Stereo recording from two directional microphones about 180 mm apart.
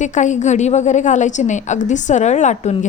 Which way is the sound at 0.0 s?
40° left (ahead or behind).